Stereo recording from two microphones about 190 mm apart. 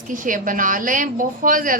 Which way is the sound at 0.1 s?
45° right (ahead or behind).